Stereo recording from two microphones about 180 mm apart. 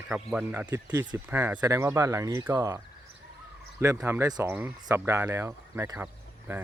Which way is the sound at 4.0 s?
15° right (ahead or behind).